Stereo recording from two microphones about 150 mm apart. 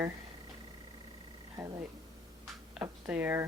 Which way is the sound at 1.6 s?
25° right (ahead or behind).